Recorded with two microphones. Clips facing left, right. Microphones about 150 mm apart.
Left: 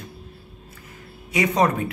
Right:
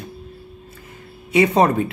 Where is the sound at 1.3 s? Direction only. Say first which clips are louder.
Right 5 dB; 25° right (ahead or behind).